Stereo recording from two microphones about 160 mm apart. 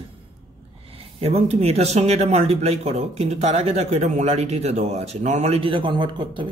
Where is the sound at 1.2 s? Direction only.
40° right (ahead or behind).